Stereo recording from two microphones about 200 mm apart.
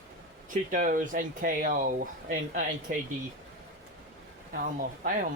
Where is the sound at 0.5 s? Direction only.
40° right (ahead or behind).